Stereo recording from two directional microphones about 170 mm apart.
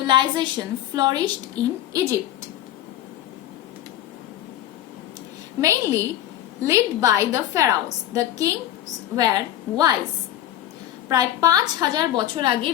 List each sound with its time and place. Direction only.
0.1 s a woman's voice: 25° right (ahead or behind)
5.5 s a woman's voice: 15° right (ahead or behind)
11.1 s a woman's voice: 20° right (ahead or behind)